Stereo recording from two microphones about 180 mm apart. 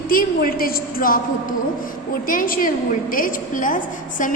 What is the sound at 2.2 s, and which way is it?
A woman's voice, 50° left (ahead or behind).